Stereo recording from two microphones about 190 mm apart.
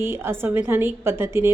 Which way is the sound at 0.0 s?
10° right (ahead or behind).